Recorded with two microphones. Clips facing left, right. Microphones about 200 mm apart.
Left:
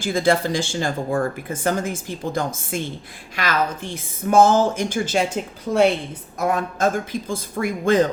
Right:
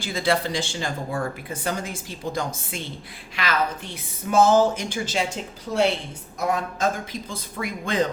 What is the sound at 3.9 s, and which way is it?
A woman's voice, 50° left (ahead or behind).